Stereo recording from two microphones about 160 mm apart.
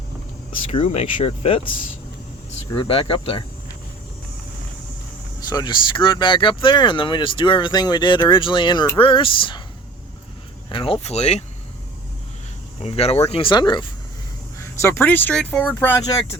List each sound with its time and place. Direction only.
0.7 s speech: 40° left (ahead or behind)
2.7 s speech: 35° left (ahead or behind)
5.5 s speech: 25° left (ahead or behind)
10.7 s speech: 35° left (ahead or behind)
12.8 s speech: 40° left (ahead or behind)
14.6 s speech: 15° left (ahead or behind)